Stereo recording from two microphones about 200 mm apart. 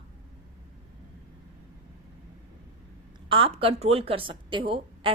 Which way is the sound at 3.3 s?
25° right (ahead or behind).